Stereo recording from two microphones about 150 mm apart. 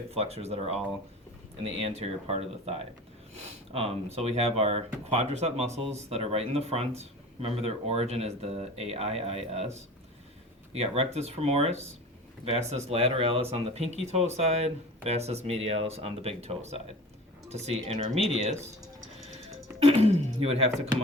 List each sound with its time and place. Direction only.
0.1 s speech: 45° right (ahead or behind)
1.9 s speech: 45° right (ahead or behind)
10.7 s speech: 40° right (ahead or behind)
19.8 s speech: 40° right (ahead or behind)